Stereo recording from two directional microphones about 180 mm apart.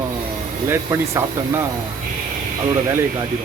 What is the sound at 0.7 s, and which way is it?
Speech, 15° right (ahead or behind).